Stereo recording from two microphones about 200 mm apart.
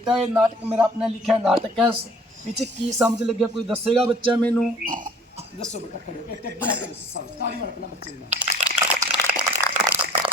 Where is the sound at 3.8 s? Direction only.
25° right (ahead or behind).